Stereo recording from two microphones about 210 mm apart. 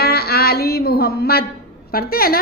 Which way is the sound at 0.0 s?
50° left (ahead or behind).